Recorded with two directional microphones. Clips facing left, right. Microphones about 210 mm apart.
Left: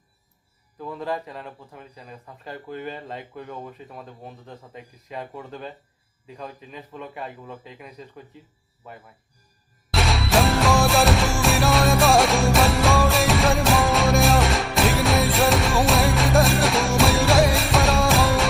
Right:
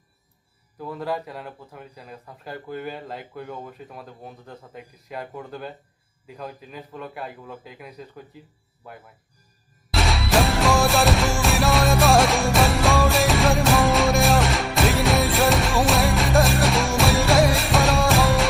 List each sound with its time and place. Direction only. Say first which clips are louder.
0.8 s speech: right 1 dB; 5° right (ahead or behind)
9.9 s music: even; centre (ahead or behind)